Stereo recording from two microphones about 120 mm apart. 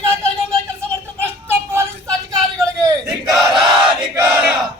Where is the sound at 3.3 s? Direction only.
Centre (ahead or behind).